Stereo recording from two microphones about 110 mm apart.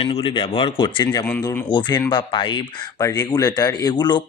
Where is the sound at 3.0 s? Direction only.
35° left (ahead or behind).